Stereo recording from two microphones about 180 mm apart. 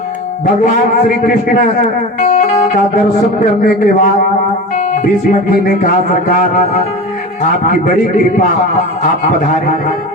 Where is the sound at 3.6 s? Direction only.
50° left (ahead or behind).